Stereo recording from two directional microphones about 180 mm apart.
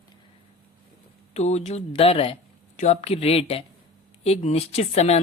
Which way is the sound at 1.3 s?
40° left (ahead or behind).